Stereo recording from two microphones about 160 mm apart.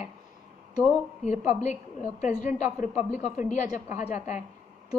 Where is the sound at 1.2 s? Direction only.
45° left (ahead or behind).